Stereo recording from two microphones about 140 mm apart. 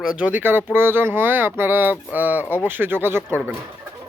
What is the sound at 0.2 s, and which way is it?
Speech, 10° right (ahead or behind).